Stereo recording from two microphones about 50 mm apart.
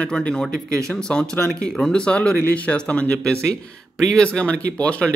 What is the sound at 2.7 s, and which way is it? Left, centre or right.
Speech, centre.